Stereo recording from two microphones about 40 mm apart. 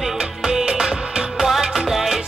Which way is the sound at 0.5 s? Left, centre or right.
Centre.